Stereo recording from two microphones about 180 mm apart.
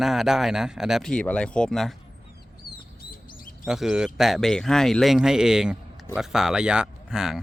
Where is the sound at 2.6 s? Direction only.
60° left (ahead or behind).